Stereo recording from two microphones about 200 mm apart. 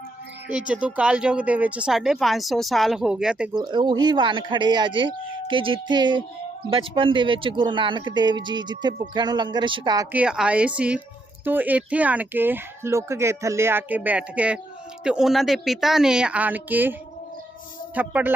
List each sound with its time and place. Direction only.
0.4 s speech: 5° right (ahead or behind)
3.5 s speech: 20° right (ahead or behind)
17.9 s speech: 5° right (ahead or behind)